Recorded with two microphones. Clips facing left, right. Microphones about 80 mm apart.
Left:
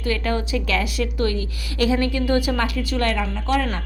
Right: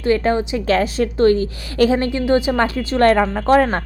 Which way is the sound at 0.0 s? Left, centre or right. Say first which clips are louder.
Right 7 dB; right.